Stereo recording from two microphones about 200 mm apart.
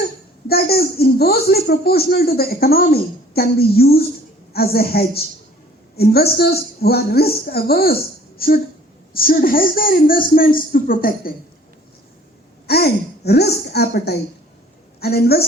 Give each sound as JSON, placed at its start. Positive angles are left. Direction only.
{"t": 0.4, "sound": "a child's voice", "side_deg": 50}
{"t": 12.6, "sound": "a child's voice", "side_deg": 50}